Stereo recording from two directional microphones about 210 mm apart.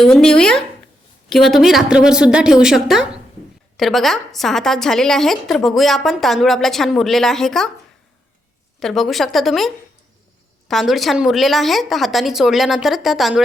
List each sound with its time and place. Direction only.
0.0 s a woman's voice: 5° left (ahead or behind)
8.8 s a woman's voice: centre (ahead or behind)